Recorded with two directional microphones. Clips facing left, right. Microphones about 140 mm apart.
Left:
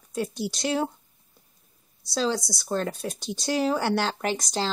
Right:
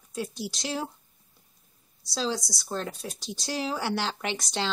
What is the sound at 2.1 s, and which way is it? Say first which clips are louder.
Speech: left 4 dB; centre (ahead or behind).